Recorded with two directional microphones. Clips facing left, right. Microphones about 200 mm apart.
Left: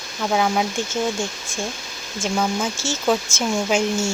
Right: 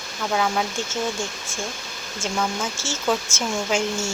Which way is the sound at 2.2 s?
15° left (ahead or behind).